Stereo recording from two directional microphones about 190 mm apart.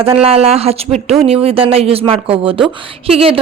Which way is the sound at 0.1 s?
30° right (ahead or behind).